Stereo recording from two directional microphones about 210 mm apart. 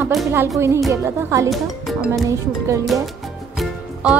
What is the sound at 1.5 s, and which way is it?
Speech, centre (ahead or behind).